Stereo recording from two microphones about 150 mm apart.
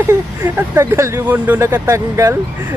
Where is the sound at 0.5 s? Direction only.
10° right (ahead or behind).